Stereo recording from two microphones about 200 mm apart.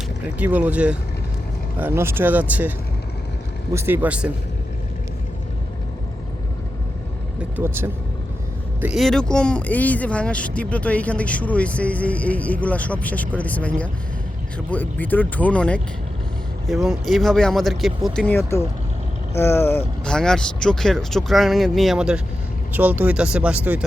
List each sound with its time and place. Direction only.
0.2 s speech: 10° right (ahead or behind)
7.5 s speech: 10° right (ahead or behind)